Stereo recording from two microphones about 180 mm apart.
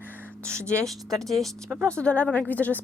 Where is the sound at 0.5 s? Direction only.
15° right (ahead or behind).